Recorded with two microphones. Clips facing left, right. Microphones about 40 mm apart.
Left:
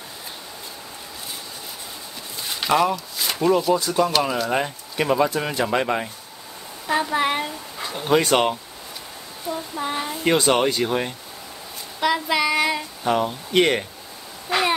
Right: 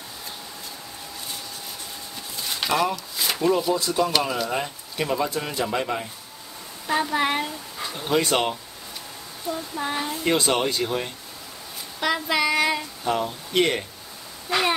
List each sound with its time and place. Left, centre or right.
2.5 s speech: centre
4.1 s child singing: centre
4.5 s speech: left
6.9 s speech: centre
9.5 s child singing: centre
10.2 s speech: centre
12.0 s child singing: centre
13.0 s speech: centre